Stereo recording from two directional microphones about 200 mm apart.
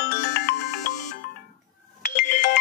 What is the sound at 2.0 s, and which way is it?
Ringtone, 60° left (ahead or behind).